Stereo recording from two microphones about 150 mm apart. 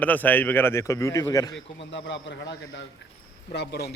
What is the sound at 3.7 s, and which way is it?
Speech, 90° left.